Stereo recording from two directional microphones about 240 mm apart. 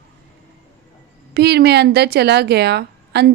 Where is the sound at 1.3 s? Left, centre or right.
Right.